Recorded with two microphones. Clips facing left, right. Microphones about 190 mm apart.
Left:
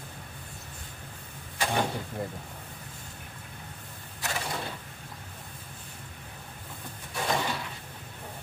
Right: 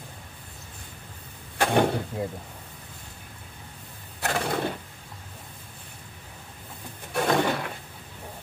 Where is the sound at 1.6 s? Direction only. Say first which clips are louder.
Right 6 dB; 60° right (ahead or behind).